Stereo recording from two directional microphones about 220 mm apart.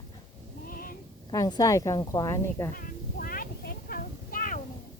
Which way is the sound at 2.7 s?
40° left (ahead or behind).